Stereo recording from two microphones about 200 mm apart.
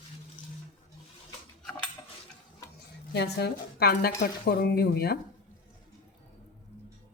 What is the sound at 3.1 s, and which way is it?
A woman's voice, 55° left (ahead or behind).